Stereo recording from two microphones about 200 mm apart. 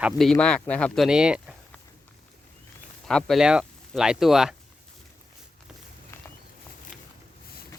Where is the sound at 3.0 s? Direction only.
Centre (ahead or behind).